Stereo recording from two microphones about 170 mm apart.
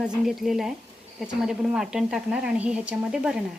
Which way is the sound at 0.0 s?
Centre (ahead or behind).